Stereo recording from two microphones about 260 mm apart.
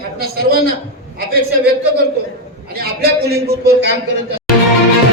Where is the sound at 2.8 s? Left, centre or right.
Right.